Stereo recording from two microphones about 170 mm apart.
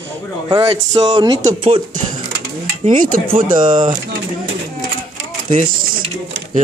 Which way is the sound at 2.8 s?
55° right (ahead or behind).